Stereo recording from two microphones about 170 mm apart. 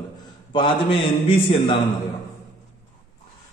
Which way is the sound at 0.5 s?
30° left (ahead or behind).